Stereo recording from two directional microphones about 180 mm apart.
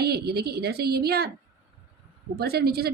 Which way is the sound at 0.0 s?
60° right (ahead or behind).